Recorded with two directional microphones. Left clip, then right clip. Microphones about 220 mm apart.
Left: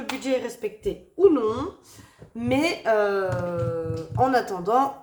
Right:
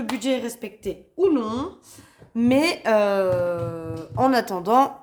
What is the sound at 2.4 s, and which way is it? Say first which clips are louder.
Speech: right 4 dB; 40° right (ahead or behind).